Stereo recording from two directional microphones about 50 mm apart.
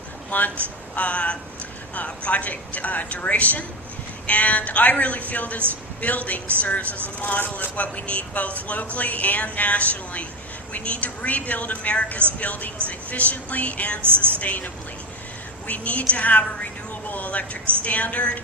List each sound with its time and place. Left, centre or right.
0.3 s a man's voice: left
14.0 s a woman's voice: right
14.3 s a man's voice: left